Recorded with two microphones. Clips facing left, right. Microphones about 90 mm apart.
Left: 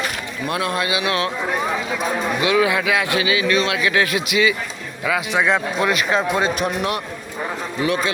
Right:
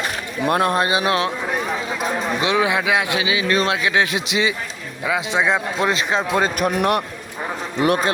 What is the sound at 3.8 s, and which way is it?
Speech, 20° right (ahead or behind).